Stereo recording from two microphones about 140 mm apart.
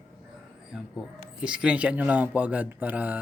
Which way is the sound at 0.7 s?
5° right (ahead or behind).